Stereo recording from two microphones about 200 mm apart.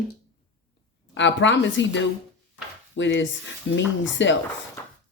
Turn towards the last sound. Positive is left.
turn(degrees=65)  # may be behind; listen again after turning